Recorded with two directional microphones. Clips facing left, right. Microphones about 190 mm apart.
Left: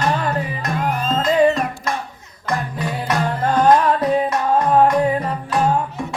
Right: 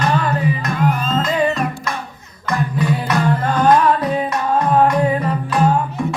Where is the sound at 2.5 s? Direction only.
45° left (ahead or behind).